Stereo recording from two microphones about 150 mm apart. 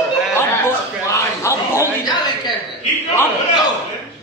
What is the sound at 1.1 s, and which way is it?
Speech, 20° left (ahead or behind).